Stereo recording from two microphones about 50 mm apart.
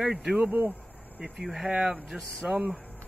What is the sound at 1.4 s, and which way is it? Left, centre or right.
Speech, centre.